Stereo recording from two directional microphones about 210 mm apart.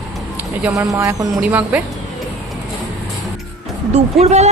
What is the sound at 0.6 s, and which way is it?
Speech, 15° right (ahead or behind).